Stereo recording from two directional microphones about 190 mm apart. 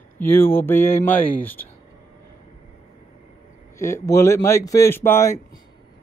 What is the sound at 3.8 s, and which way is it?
Speech, 15° left (ahead or behind).